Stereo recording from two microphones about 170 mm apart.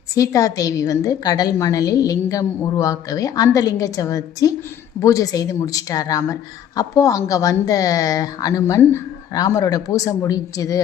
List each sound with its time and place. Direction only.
0.1 s a woman's voice: 20° left (ahead or behind)